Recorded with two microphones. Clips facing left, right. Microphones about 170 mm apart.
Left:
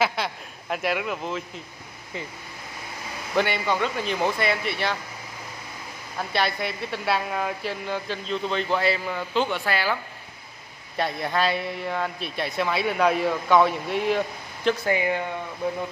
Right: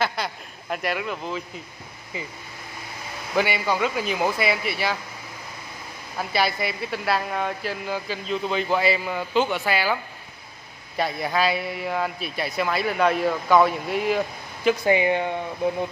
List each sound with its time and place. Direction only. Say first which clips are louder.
0.0 s speech: left 1 dB; centre (ahead or behind)
3.3 s a man's voice: right 1 dB; 5° right (ahead or behind)
6.1 s a man's voice: right 2 dB; 5° right (ahead or behind)
11.0 s a man's voice: right 1 dB; centre (ahead or behind)
14.9 s speech: right 4 dB; 20° right (ahead or behind)